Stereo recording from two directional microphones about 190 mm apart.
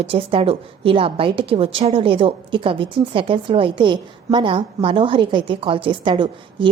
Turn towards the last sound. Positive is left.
turn(degrees=-25)  # may be behind; listen again after turning